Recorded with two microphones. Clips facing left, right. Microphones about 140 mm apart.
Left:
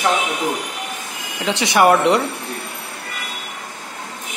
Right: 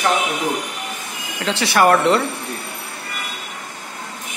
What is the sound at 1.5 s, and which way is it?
Speech, 20° left (ahead or behind).